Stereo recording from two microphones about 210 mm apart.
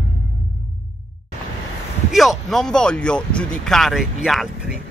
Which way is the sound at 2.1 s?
Centre (ahead or behind).